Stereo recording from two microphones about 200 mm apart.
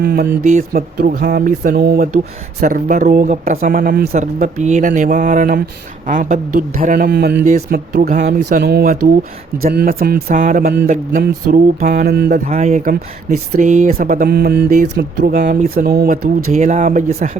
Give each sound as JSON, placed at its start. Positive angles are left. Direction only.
{"t": 0.0, "sound": "speech", "side_deg": -50}
{"t": 12.5, "sound": "speech", "side_deg": -35}
{"t": 14.7, "sound": "speech", "side_deg": -40}